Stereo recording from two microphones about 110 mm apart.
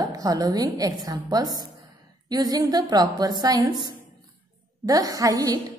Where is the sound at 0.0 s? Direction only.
35° right (ahead or behind).